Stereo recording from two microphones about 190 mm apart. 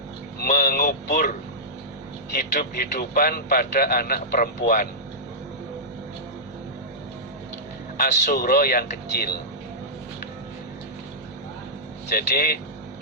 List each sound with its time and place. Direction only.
0.3 s a man's voice: 55° left (ahead or behind)
8.3 s a man's voice: 55° left (ahead or behind)
12.1 s a man's voice: 55° left (ahead or behind)